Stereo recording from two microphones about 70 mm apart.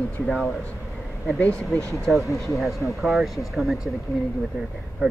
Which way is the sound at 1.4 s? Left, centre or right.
Centre.